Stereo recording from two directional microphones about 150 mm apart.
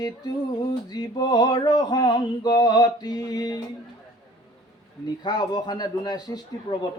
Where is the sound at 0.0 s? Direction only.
25° left (ahead or behind).